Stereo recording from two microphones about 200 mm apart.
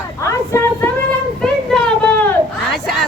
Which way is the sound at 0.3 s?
15° left (ahead or behind).